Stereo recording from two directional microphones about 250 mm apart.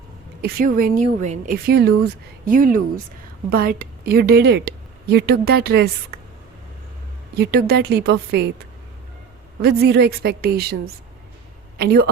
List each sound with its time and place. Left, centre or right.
0.4 s a woman's voice: right
7.3 s a woman's voice: right